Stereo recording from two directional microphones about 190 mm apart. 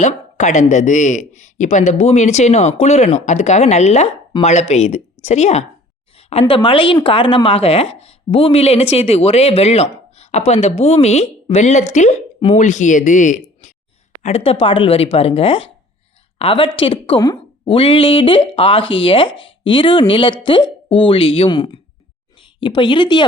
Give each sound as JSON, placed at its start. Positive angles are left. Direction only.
{"t": 0.0, "sound": "speech", "side_deg": 40}
{"t": 6.4, "sound": "speech", "side_deg": 25}